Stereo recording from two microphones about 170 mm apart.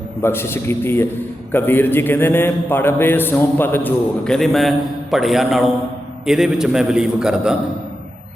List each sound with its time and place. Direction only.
0.2 s a man's voice: 15° left (ahead or behind); by 7.5 s 5° right (ahead or behind)